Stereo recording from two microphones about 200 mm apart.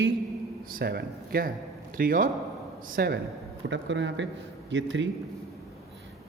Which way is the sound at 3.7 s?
65° right (ahead or behind).